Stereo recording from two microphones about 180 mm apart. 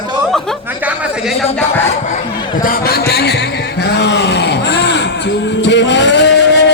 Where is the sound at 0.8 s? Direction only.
Centre (ahead or behind).